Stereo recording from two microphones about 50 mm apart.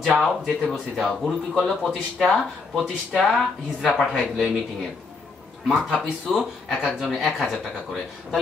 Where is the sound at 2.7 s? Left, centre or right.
Centre.